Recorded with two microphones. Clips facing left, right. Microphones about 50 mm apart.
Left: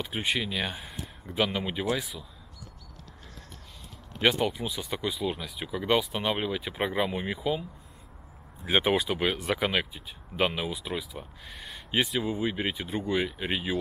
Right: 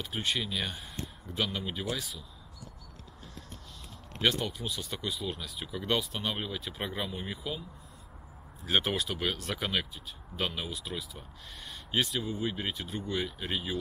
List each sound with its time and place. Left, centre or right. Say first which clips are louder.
0.0 s speech: left 3 dB; centre
4.2 s speech: left 5 dB; centre
8.6 s speech: left 5 dB; centre